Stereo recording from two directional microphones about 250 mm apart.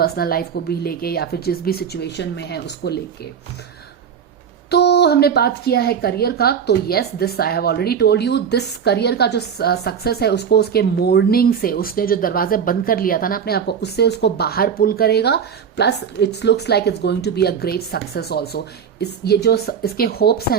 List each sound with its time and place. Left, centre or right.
0.0 s a woman's voice: left
4.7 s a woman's voice: left